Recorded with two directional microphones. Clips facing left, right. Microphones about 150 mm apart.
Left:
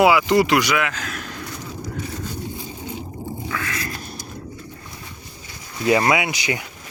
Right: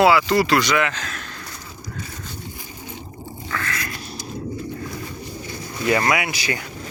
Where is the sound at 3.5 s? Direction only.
10° left (ahead or behind).